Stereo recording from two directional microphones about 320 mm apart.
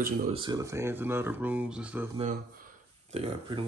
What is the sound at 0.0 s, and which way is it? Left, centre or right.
Speech, centre.